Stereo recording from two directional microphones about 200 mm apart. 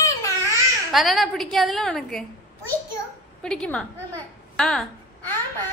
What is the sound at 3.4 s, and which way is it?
Speech, 5° left (ahead or behind).